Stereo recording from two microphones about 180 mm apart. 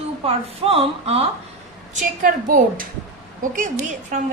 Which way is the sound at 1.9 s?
45° right (ahead or behind).